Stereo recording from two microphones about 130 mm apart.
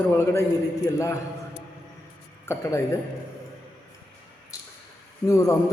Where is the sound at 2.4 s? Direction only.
20° left (ahead or behind).